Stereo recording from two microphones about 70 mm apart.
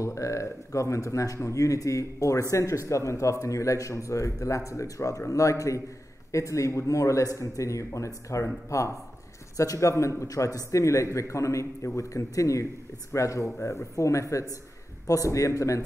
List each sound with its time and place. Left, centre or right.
0.0 s speech: left